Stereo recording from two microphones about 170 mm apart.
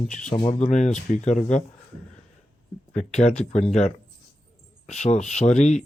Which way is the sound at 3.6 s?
40° left (ahead or behind).